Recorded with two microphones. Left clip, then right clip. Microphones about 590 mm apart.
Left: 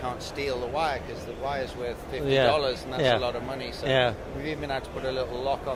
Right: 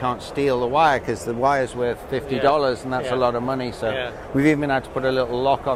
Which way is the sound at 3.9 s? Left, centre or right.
Left.